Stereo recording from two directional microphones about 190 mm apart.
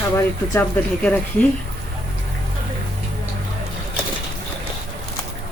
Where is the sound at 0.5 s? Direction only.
10° left (ahead or behind).